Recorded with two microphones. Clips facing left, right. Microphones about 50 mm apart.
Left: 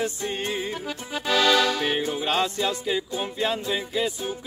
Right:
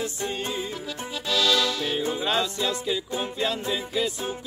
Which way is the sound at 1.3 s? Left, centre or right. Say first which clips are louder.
Left 3 dB; left.